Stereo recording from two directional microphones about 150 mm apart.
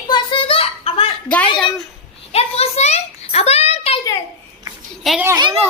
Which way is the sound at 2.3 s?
45° left (ahead or behind).